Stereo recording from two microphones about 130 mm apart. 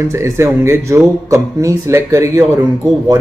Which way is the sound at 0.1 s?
20° right (ahead or behind).